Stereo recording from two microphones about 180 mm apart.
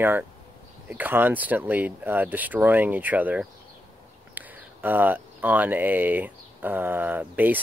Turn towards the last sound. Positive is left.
turn(degrees=-10)  # may be behind; listen again after turning